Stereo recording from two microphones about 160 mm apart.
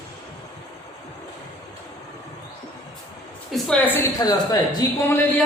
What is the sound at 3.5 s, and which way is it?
Speech, 5° left (ahead or behind).